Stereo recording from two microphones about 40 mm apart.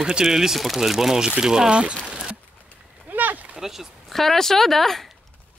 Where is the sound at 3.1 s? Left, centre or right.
Right.